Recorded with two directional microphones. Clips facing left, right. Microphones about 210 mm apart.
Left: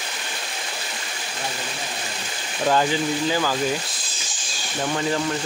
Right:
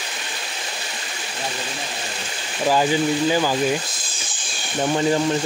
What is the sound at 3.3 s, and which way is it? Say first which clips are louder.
Speech: right 3 dB; 15° right (ahead or behind).